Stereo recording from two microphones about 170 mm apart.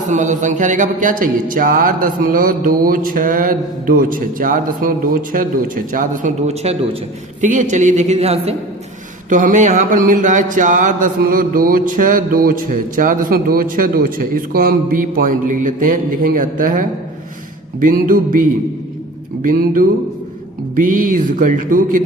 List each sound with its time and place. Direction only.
0.1 s speech: 45° right (ahead or behind)
6.5 s a man's voice: 40° right (ahead or behind)
9.3 s speech: 50° right (ahead or behind)